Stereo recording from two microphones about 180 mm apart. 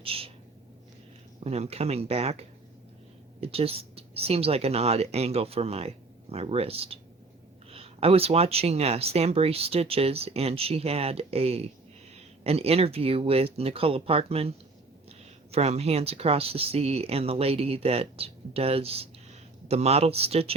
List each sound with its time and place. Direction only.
0.0 s a sound: 30° right (ahead or behind)
1.5 s speech: 35° right (ahead or behind)
3.4 s speech: 35° right (ahead or behind)
15.5 s speech: 35° right (ahead or behind)